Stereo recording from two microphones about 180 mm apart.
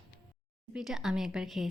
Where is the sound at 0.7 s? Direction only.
Centre (ahead or behind).